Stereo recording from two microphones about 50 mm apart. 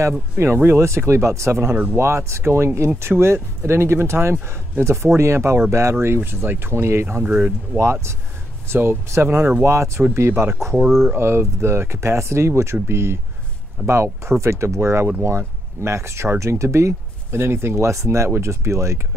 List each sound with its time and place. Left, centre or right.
0.4 s speech: right
7.3 s speech: right
7.8 s speech: right
9.7 s speech: right
14.4 s speech: right